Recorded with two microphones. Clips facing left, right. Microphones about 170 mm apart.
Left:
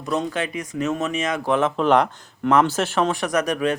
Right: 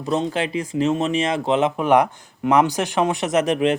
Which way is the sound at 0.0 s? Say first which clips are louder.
Right 2 dB; 30° right (ahead or behind).